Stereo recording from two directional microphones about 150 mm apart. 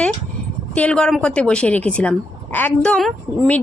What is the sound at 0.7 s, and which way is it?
A woman's voice, 10° left (ahead or behind).